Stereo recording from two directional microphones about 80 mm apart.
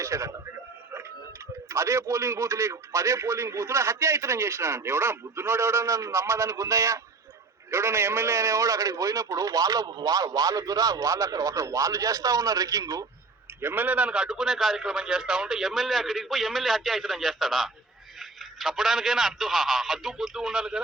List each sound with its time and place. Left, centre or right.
0.0 s a man's voice: right
1.7 s a man's voice: right
13.6 s a man's voice: right; by 20.8 s centre